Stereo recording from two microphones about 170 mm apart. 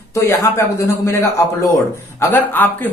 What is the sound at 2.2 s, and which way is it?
Speech, 10° left (ahead or behind).